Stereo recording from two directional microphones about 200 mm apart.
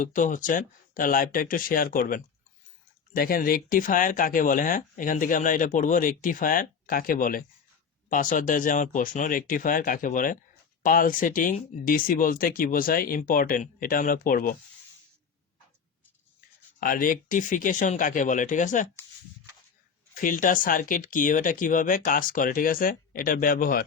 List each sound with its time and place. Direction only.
0.0 s speech: 40° left (ahead or behind)
16.8 s speech: 45° left (ahead or behind)
20.1 s speech: 40° left (ahead or behind)